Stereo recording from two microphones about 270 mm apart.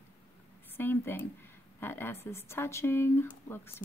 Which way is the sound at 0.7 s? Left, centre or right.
Centre.